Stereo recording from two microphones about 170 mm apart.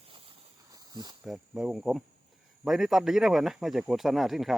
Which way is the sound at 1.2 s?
5° right (ahead or behind).